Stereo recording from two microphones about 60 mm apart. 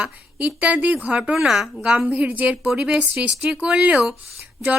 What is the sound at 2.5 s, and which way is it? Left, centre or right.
Speech, centre.